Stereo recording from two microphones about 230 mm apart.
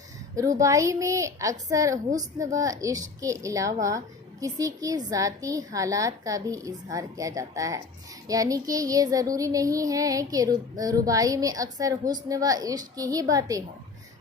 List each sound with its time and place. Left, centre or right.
0.3 s a child's voice: centre